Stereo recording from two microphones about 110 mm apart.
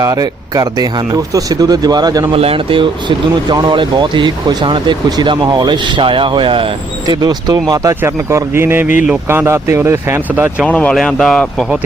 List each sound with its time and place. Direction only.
0.0 s speech: 35° right (ahead or behind)
2.3 s speech: 55° right (ahead or behind)
7.1 s speech: 40° right (ahead or behind); by 10.5 s 20° right (ahead or behind)
10.7 s speech: 15° left (ahead or behind)
10.9 s speech: 5° left (ahead or behind)